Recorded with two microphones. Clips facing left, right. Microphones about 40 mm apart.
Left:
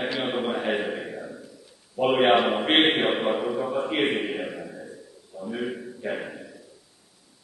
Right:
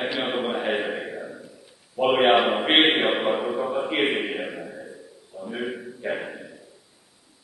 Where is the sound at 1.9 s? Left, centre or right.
Centre.